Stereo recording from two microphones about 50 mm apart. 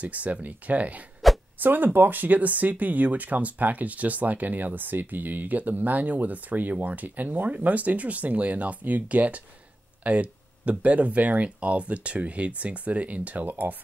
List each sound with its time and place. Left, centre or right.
0.0 s speech: right